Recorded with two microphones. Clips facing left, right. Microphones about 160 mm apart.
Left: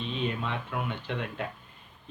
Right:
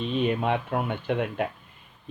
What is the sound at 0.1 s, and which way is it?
A man's voice, 55° right (ahead or behind).